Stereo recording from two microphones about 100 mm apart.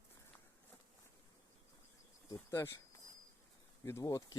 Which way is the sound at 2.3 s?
25° left (ahead or behind).